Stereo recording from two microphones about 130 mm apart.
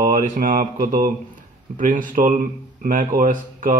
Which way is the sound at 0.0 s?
90° right.